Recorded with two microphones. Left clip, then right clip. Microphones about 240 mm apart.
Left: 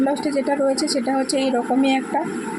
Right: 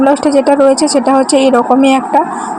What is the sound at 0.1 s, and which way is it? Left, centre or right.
A woman's voice, right.